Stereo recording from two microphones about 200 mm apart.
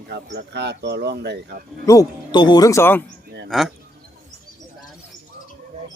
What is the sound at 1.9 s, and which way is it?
Speech, 20° left (ahead or behind).